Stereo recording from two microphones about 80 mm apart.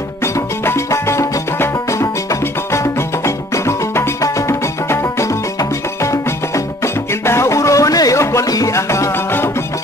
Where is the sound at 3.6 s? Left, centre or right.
Left.